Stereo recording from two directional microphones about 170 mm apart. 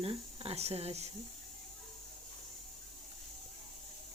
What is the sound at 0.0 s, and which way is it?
Speech, 35° right (ahead or behind).